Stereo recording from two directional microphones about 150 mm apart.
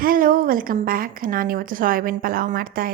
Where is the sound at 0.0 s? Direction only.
70° right (ahead or behind).